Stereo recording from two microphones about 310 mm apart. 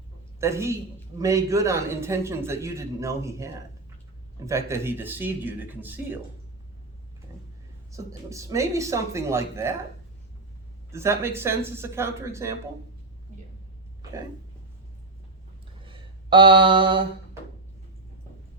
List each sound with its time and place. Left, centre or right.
0.3 s a man's voice: centre
7.9 s a man's voice: centre
10.9 s a man's voice: centre
15.9 s mantra: centre